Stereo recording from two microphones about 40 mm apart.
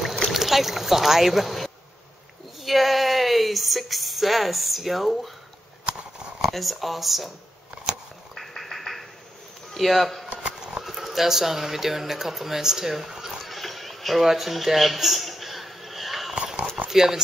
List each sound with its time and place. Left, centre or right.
0.3 s speech: centre
5.9 s a sound: right
6.5 s speech: centre
8.4 s quack: centre
9.8 s speech: centre
10.8 s a sound: centre
16.9 s speech: centre